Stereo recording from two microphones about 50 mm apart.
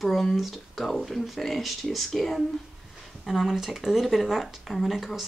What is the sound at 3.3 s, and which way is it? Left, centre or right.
Speech, centre.